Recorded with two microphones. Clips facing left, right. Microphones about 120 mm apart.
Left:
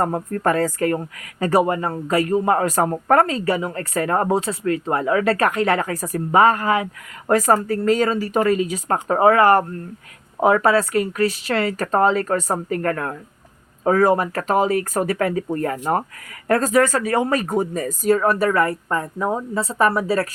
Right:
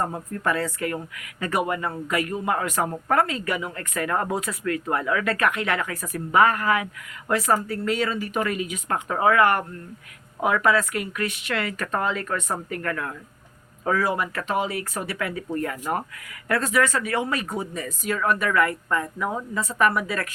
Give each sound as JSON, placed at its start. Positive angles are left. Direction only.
{"t": 0.0, "sound": "speech", "side_deg": 55}
{"t": 7.3, "sound": "speech", "side_deg": 45}